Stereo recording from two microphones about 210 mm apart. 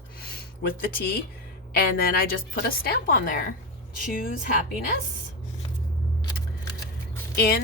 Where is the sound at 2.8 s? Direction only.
45° left (ahead or behind).